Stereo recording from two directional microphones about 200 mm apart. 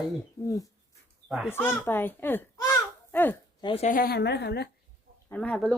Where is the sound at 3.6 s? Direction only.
25° left (ahead or behind).